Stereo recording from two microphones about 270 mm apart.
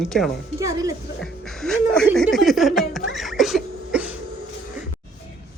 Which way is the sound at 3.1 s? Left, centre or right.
Centre.